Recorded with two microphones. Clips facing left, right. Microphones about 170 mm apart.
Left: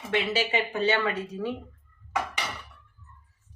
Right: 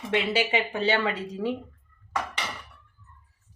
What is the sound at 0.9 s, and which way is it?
Speech, 25° right (ahead or behind).